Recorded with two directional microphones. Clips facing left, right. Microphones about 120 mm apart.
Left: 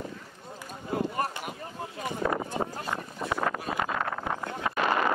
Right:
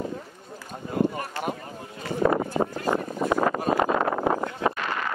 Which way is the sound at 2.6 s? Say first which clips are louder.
Right 7 dB; 45° right (ahead or behind).